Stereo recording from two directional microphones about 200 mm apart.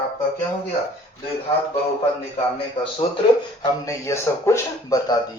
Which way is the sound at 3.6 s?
15° left (ahead or behind).